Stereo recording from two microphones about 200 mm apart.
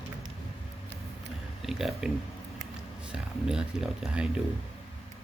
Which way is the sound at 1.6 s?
Centre (ahead or behind).